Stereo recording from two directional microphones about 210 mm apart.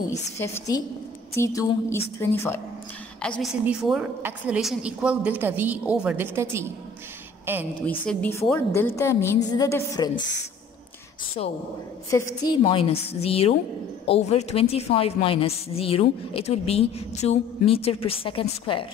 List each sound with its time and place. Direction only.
0.4 s a woman's voice: 15° left (ahead or behind); by 6.7 s 10° right (ahead or behind)
8.0 s a woman's voice: 5° left (ahead or behind)
12.1 s a woman's voice: 15° left (ahead or behind)